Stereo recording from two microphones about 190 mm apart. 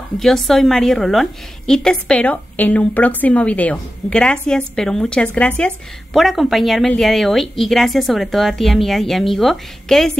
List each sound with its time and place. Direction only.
0.2 s a woman's voice: centre (ahead or behind)